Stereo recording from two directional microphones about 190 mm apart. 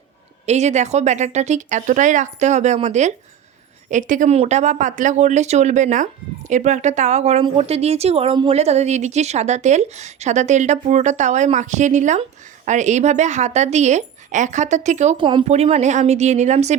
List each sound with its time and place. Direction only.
0.4 s speech: 35° right (ahead or behind)
15.2 s speech: 25° right (ahead or behind)